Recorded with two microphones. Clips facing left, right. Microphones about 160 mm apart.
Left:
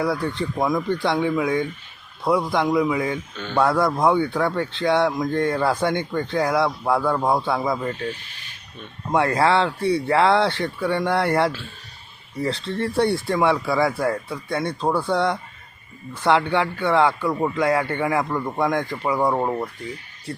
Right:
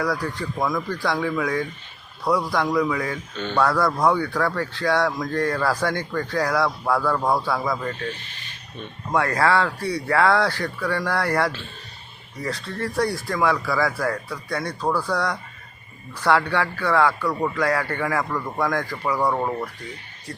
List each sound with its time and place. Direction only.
0.0 s speech: 25° left (ahead or behind)
3.3 s speech: 5° left (ahead or behind)
3.6 s speech: 25° left (ahead or behind)
9.1 s speech: 25° left (ahead or behind)